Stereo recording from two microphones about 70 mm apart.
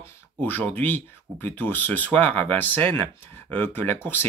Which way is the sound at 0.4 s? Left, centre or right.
Left.